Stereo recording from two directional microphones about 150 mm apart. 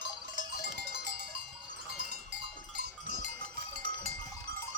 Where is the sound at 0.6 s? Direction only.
90° right.